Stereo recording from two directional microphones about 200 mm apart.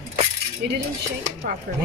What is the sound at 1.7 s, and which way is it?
Speech, 45° right (ahead or behind).